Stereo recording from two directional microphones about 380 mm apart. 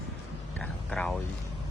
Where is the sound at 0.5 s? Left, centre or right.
Centre.